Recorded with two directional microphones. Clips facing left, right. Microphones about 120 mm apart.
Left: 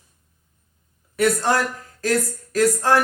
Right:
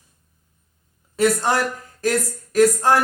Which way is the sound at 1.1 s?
20° right (ahead or behind).